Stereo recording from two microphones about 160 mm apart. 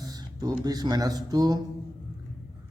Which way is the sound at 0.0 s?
25° right (ahead or behind).